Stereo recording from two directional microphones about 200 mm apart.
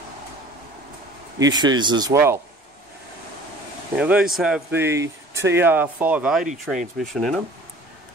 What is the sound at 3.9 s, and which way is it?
Speech, 5° right (ahead or behind).